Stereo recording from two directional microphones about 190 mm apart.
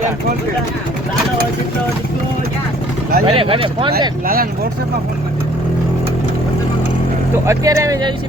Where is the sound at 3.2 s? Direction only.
30° right (ahead or behind).